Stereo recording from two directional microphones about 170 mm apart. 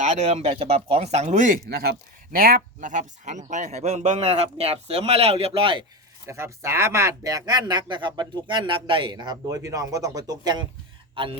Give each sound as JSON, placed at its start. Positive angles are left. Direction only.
{"t": 0.0, "sound": "speech", "side_deg": -45}
{"t": 1.7, "sound": "speech", "side_deg": -65}
{"t": 6.2, "sound": "speech", "side_deg": -15}